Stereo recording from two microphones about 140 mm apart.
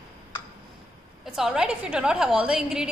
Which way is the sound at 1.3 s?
5° right (ahead or behind).